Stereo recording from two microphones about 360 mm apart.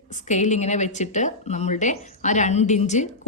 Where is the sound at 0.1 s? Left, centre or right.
Centre.